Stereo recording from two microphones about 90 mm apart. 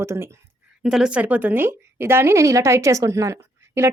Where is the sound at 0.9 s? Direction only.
10° right (ahead or behind).